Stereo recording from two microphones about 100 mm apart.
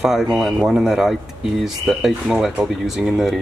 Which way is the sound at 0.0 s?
5° right (ahead or behind).